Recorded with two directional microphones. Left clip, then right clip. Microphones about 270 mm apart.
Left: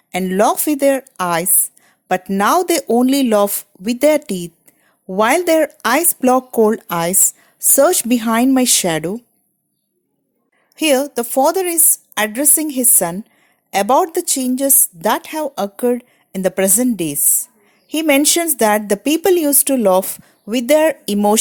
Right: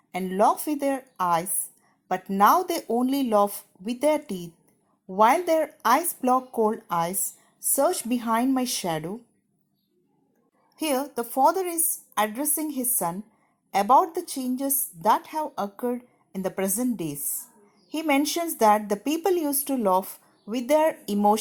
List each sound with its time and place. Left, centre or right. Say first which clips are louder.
0.1 s a woman's voice: left 7 dB; left
10.8 s a woman's voice: left 12 dB; left